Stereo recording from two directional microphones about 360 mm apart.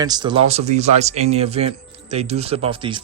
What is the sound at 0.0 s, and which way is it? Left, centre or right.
Speech, centre.